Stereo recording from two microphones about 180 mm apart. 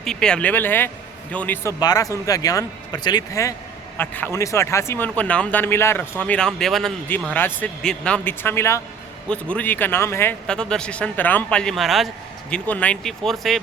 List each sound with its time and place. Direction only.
0.0 s speech: 5° left (ahead or behind)
1.8 s a man's voice: 20° left (ahead or behind); by 13.6 s centre (ahead or behind)